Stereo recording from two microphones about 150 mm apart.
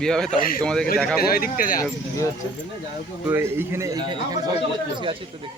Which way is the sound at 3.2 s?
15° right (ahead or behind).